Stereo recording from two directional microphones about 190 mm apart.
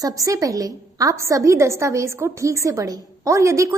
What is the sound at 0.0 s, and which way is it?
A woman's voice, 15° right (ahead or behind).